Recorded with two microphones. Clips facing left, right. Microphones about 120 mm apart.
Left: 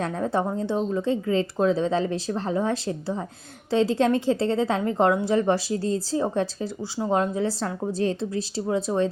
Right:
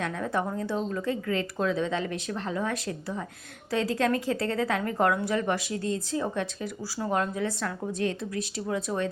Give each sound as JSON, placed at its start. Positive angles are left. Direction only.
{"t": 0.0, "sound": "a woman's voice", "side_deg": 35}